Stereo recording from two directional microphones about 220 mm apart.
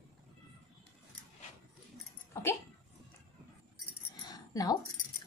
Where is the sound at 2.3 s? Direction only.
10° left (ahead or behind).